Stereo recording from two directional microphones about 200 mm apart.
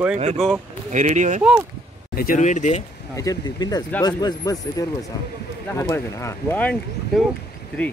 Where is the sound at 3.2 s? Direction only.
20° left (ahead or behind).